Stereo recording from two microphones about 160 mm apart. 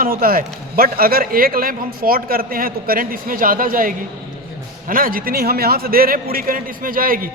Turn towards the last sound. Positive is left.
turn(degrees=-60)  # may be behind; listen again after turning